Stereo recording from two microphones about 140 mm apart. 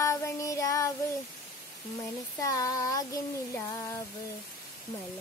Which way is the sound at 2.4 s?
25° left (ahead or behind).